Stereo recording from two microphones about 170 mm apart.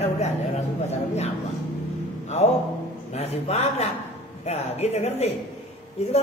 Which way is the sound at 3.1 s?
40° left (ahead or behind).